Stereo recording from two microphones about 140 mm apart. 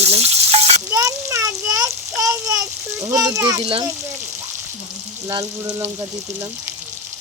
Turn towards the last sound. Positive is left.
turn(degrees=-15)  # may be behind; listen again after turning